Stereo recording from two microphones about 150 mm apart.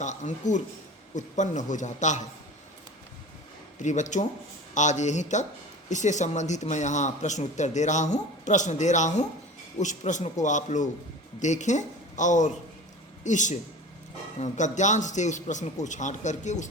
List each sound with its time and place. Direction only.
0.0 s speech: 55° left (ahead or behind)
3.8 s a man's voice: 55° left (ahead or behind)